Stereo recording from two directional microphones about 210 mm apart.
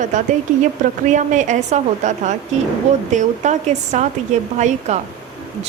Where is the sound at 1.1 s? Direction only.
35° right (ahead or behind).